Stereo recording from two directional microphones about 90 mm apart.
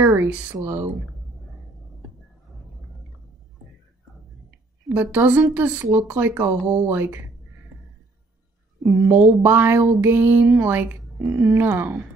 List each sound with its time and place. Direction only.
0.0 s a sound: 25° right (ahead or behind)
0.7 s speech: 25° right (ahead or behind)
4.9 s speech: 20° right (ahead or behind)
8.8 s speech: 40° right (ahead or behind)
9.4 s speech: 25° right (ahead or behind)